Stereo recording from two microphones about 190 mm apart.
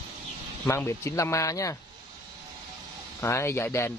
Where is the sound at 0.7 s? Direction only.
15° left (ahead or behind).